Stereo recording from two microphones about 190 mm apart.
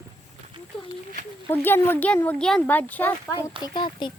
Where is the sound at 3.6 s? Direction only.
25° left (ahead or behind).